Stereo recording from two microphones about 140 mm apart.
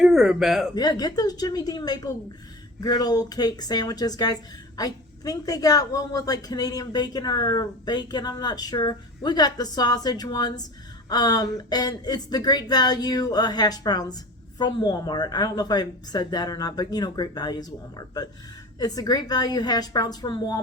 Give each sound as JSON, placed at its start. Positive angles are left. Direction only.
{"t": 0.0, "sound": "speech", "side_deg": -5}
{"t": 0.8, "sound": "a woman's voice", "side_deg": 30}